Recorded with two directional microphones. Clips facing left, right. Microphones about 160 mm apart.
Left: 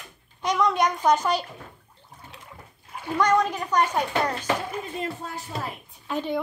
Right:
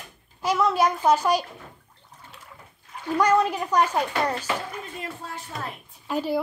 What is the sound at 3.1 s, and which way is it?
Speech, 10° right (ahead or behind).